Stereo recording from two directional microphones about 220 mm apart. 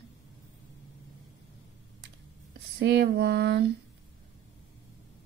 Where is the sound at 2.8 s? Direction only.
50° right (ahead or behind).